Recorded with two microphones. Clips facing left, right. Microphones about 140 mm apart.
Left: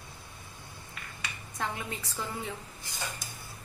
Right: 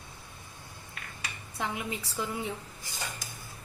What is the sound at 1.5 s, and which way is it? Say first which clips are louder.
Speech: right 2 dB; 15° right (ahead or behind).